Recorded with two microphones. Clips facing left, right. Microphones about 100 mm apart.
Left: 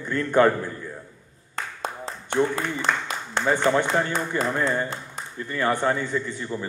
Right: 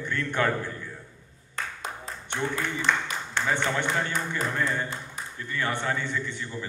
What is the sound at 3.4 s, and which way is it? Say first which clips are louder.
A man's voice: left 7 dB; 40° left (ahead or behind).